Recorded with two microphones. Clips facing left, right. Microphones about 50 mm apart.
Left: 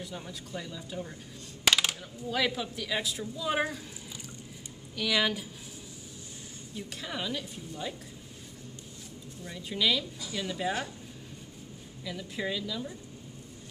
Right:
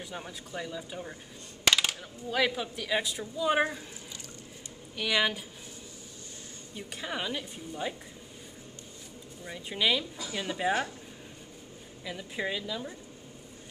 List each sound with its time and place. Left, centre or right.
0.0 s a woman's voice: centre
1.6 s coin: centre
2.3 s a woman's voice: centre
4.9 s a woman's voice: centre
6.7 s a woman's voice: centre
9.4 s a woman's voice: centre
12.0 s a woman's voice: centre